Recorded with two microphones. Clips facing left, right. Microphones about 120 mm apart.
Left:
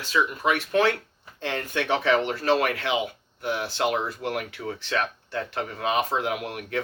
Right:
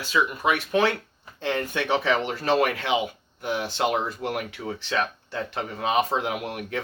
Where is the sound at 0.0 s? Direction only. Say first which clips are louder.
Right 1 dB; 15° right (ahead or behind).